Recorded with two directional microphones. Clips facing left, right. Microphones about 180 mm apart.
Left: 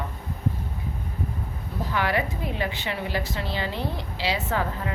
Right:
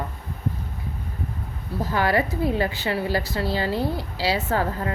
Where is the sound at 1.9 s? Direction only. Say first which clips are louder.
Right 4 dB; 40° right (ahead or behind).